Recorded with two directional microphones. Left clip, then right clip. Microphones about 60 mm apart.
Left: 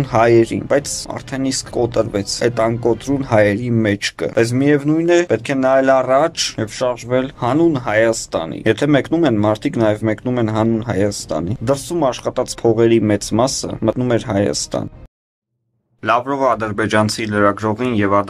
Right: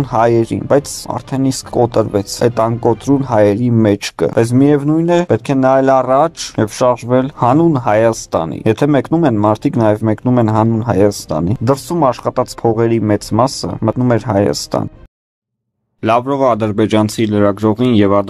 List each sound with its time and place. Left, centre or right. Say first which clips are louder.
0.0 s speech: even; right
11.6 s speech: right 4 dB; centre
16.0 s speech: right 3 dB; right